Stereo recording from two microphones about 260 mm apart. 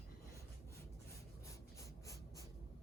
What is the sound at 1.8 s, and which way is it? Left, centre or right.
Writing, centre.